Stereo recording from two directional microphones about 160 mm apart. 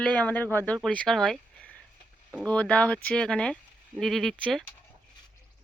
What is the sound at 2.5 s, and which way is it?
Speech, 10° left (ahead or behind).